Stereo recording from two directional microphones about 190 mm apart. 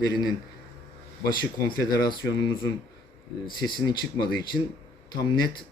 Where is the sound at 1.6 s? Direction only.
20° left (ahead or behind).